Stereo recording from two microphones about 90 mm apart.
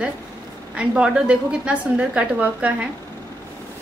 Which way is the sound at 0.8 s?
10° right (ahead or behind).